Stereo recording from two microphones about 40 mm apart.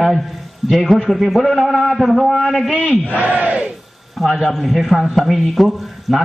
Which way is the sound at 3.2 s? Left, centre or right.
Right.